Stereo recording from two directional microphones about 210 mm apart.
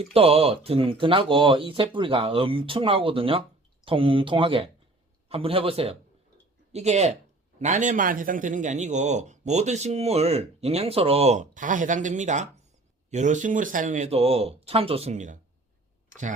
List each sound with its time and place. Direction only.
0.0 s a man's voice: 25° right (ahead or behind)